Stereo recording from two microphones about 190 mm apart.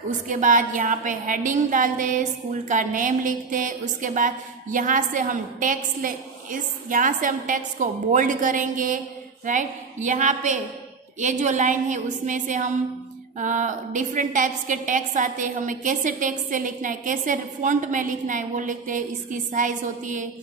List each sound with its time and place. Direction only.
0.3 s a woman's voice: 45° right (ahead or behind)